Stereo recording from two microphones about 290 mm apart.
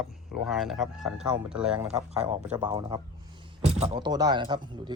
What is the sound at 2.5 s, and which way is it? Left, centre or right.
Speech, centre.